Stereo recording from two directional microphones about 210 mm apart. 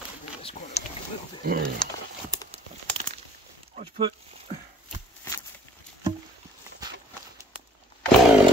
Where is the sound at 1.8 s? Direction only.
5° left (ahead or behind).